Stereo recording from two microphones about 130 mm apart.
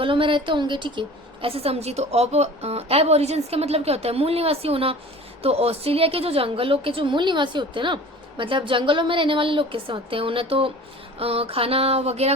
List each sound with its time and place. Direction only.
0.0 s a woman's voice: 40° right (ahead or behind)